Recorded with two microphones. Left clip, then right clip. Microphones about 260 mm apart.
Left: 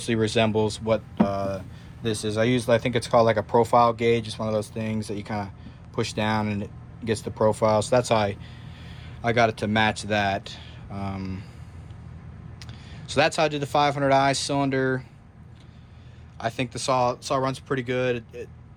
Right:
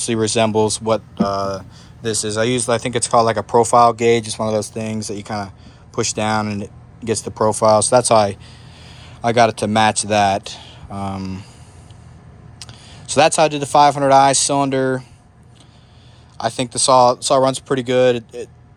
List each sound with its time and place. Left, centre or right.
0.0 s speech: centre
12.5 s speech: centre
16.4 s speech: centre